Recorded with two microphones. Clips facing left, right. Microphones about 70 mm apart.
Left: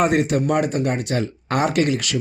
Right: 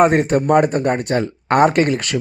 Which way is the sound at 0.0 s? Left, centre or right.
Right.